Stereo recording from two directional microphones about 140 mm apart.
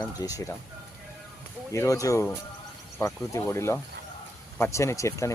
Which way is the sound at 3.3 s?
20° left (ahead or behind).